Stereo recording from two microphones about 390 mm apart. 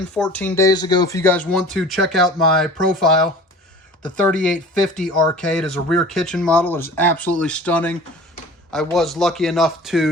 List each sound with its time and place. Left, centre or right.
0.2 s speech: centre